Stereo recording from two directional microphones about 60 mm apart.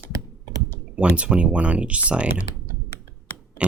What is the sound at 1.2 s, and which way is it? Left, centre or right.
Speech, centre.